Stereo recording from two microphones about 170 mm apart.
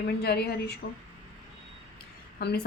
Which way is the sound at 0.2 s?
70° left (ahead or behind).